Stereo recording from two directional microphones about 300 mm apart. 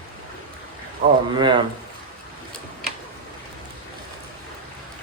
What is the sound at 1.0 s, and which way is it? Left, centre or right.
Speech, right.